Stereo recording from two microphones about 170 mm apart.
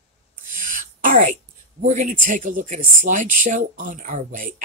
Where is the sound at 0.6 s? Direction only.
50° right (ahead or behind).